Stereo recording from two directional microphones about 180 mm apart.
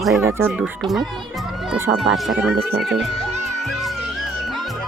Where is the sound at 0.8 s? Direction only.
Centre (ahead or behind).